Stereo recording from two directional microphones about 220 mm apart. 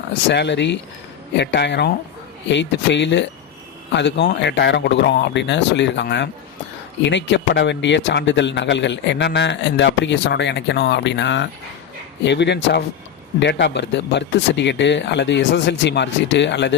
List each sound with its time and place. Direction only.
0.3 s speech: 50° left (ahead or behind)